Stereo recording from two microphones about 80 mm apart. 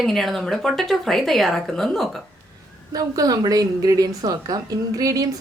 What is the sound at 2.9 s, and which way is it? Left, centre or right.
A woman's voice, right.